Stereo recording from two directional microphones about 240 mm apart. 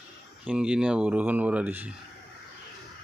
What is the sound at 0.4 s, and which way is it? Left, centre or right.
Speech, centre.